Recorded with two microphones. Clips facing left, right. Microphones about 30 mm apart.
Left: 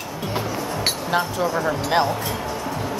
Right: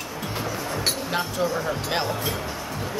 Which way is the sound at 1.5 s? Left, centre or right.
Centre.